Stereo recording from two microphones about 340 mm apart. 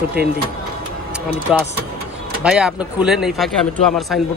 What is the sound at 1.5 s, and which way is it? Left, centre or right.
Speech, centre.